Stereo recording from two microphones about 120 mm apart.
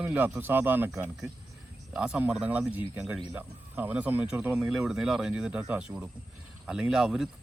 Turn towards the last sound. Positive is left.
turn(degrees=-5)  # may be behind; listen again after turning